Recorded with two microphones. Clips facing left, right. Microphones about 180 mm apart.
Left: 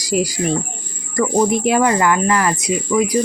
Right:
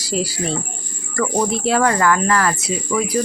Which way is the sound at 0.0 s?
15° left (ahead or behind).